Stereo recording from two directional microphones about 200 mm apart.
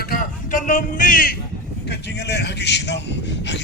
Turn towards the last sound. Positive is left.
turn(degrees=60)  # may be behind; listen again after turning